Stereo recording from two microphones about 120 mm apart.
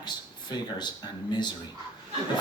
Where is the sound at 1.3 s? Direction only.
40° left (ahead or behind).